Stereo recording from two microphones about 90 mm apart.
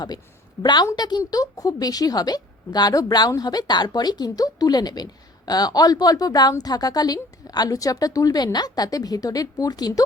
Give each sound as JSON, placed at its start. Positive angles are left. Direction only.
{"t": 0.6, "sound": "a woman's voice", "side_deg": 50}